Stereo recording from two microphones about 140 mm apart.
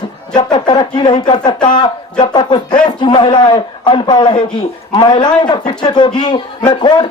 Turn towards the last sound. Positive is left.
turn(degrees=35)  # may be behind; listen again after turning